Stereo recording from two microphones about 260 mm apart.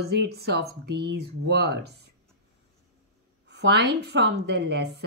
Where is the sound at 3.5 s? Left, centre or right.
Right.